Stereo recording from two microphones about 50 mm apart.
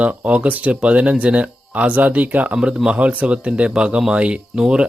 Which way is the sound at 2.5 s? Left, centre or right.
Centre.